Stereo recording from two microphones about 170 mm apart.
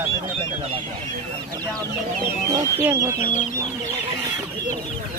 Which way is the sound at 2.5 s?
20° right (ahead or behind).